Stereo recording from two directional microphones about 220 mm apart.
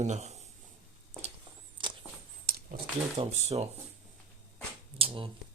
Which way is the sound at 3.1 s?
25° right (ahead or behind).